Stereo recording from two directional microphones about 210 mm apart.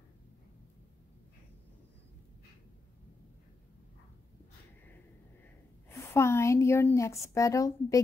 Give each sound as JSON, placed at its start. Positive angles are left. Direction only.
{"t": 5.9, "sound": "a woman's voice", "side_deg": 10}